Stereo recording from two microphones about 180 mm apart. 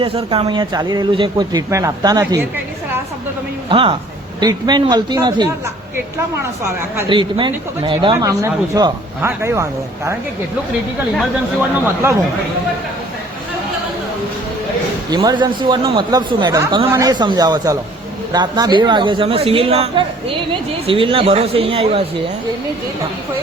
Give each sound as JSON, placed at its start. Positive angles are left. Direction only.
{"t": 0.0, "sound": "speech", "side_deg": -30}
{"t": 3.7, "sound": "speech", "side_deg": -30}
{"t": 7.1, "sound": "speech", "side_deg": -25}
{"t": 8.1, "sound": "speech", "side_deg": -15}
{"t": 15.1, "sound": "speech", "side_deg": -20}